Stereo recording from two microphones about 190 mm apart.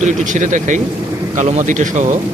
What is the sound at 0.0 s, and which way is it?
Speech, 40° right (ahead or behind).